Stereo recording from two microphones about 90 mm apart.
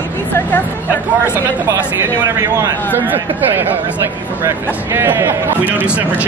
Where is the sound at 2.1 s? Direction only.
40° right (ahead or behind).